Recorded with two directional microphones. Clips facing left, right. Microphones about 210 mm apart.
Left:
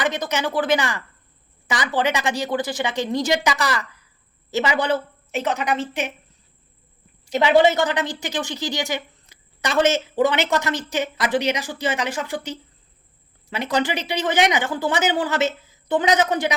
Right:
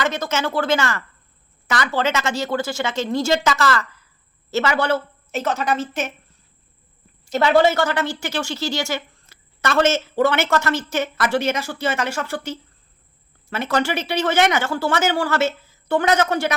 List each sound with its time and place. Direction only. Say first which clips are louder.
0.0 s a woman's voice: right 1 dB; 15° left (ahead or behind)
7.3 s a woman's voice: even; 15° left (ahead or behind)